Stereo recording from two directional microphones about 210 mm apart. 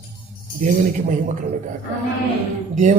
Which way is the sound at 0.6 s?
40° right (ahead or behind).